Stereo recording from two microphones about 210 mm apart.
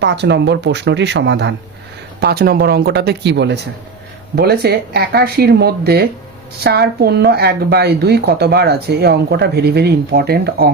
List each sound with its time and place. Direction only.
0.0 s speech: 55° right (ahead or behind)